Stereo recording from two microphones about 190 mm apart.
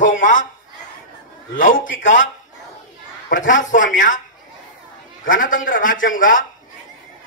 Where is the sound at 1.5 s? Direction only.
45° left (ahead or behind).